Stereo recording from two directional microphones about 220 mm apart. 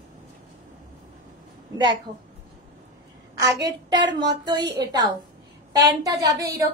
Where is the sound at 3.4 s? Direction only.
20° right (ahead or behind).